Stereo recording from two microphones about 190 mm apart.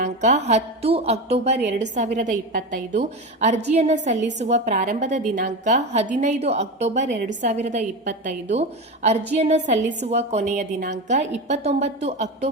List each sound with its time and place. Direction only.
0.0 s a woman's voice: 40° right (ahead or behind)